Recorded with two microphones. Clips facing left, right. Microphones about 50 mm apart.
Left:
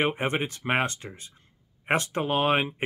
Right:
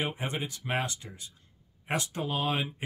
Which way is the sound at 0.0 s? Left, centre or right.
Left.